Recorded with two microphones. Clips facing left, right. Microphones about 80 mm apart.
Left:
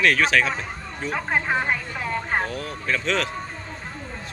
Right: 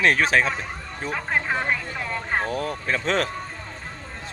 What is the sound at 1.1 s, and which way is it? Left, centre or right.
Speech, centre.